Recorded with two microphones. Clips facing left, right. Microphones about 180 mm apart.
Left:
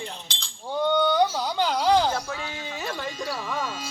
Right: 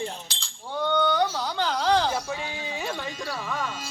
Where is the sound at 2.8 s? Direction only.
Centre (ahead or behind).